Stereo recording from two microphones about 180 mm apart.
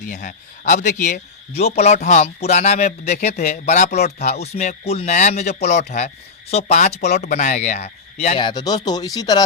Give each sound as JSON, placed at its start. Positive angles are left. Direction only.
{"t": 0.0, "sound": "speech", "side_deg": 45}
{"t": 8.4, "sound": "speech", "side_deg": 25}